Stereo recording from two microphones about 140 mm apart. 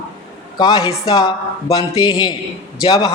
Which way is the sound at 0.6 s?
30° left (ahead or behind).